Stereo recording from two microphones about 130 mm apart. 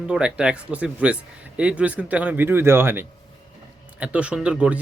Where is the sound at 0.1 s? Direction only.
5° right (ahead or behind).